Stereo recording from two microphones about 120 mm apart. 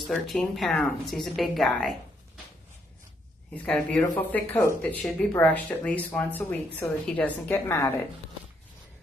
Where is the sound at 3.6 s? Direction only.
5° left (ahead or behind).